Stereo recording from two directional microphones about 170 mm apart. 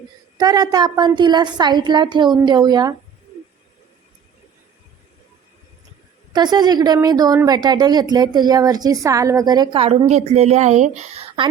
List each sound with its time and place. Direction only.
0.3 s a woman's voice: 25° right (ahead or behind)
6.3 s a woman's voice: 25° right (ahead or behind); by 10.9 s 40° right (ahead or behind)